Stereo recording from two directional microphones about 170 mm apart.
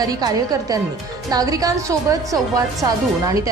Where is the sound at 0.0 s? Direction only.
20° right (ahead or behind).